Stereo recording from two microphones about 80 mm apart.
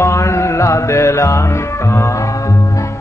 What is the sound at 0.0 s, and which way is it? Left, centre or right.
Music, left.